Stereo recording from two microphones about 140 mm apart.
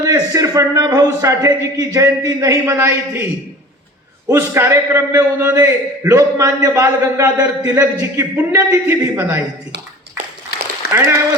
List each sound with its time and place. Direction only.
0.0 s a man's voice: 25° right (ahead or behind)
4.3 s a man's voice: 20° right (ahead or behind)
10.9 s a man's voice: 15° right (ahead or behind)